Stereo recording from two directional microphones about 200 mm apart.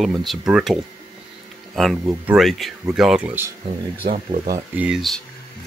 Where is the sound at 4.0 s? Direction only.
30° right (ahead or behind).